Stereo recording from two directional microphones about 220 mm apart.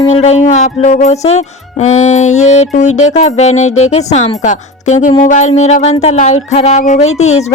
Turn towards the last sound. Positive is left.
turn(degrees=30)  # may be behind; listen again after turning